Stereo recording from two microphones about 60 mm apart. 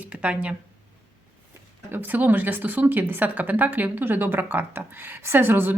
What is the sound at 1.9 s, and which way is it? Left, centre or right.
Speech, right.